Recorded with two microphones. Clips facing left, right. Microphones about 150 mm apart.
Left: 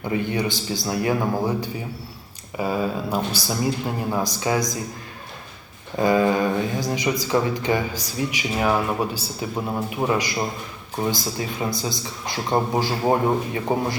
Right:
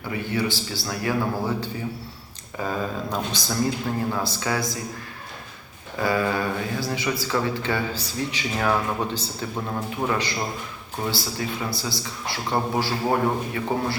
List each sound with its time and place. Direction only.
0.1 s speech: 20° left (ahead or behind)
6.0 s speech: 20° left (ahead or behind)